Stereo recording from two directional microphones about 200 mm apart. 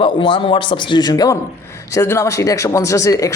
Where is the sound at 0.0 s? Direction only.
25° left (ahead or behind).